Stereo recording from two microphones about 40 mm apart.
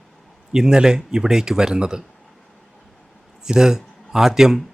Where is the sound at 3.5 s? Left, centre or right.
Centre.